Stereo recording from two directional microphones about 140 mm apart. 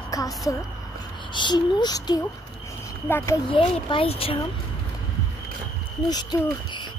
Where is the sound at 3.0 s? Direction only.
20° left (ahead or behind).